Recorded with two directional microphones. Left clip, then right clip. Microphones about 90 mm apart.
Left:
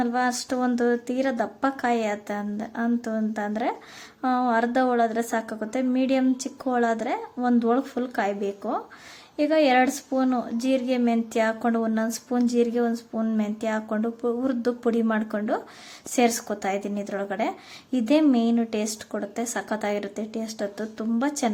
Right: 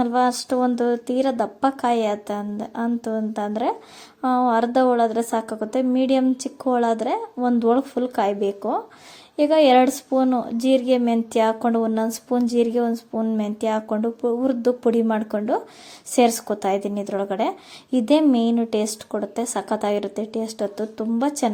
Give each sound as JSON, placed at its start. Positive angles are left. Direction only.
{"t": 0.0, "sound": "speech", "side_deg": -40}
{"t": 0.3, "sound": "speech", "side_deg": -25}